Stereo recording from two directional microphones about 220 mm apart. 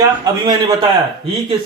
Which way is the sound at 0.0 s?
20° right (ahead or behind).